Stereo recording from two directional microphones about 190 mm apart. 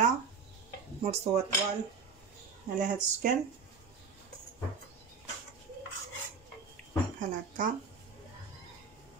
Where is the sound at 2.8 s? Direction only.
40° right (ahead or behind).